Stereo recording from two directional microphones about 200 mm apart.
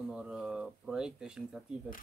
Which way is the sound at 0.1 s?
5° right (ahead or behind).